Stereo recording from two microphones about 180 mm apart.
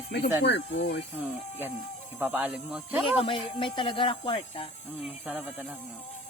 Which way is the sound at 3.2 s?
30° left (ahead or behind).